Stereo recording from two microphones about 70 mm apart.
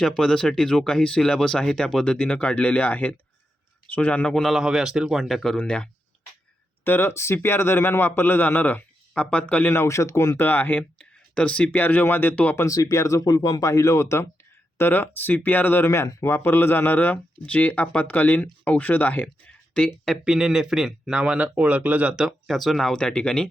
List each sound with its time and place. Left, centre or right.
0.0 s speech: centre
4.4 s speech: centre
4.6 s speech: centre
6.8 s a man's voice: left
9.7 s a man's voice: left
10.9 s speech: centre
12.6 s speech: left
13.2 s a man's voice: left
13.7 s speech: left
14.8 s a man's voice: left; by 19.9 s centre
20.2 s speech: centre
22.1 s speech: centre